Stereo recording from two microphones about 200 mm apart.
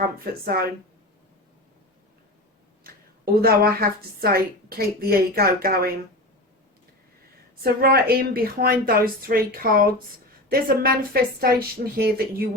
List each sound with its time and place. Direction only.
0.5 s a woman's voice: 50° right (ahead or behind)
2.8 s a woman's voice: 50° right (ahead or behind)
7.6 s a woman's voice: 50° right (ahead or behind)